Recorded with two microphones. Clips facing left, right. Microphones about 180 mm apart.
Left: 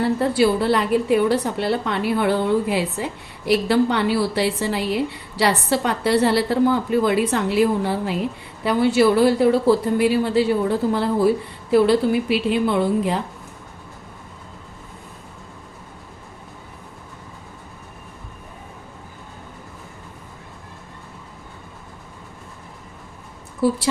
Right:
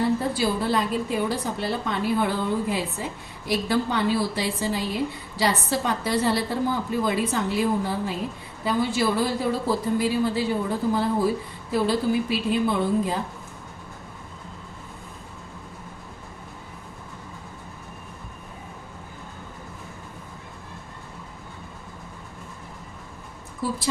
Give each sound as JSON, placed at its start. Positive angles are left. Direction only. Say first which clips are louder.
{"t": 0.2, "sound": "a woman's voice", "louder": "left 7 dB", "side_deg": 70}
{"t": 23.6, "sound": "a woman's voice", "louder": "left 8 dB", "side_deg": 70}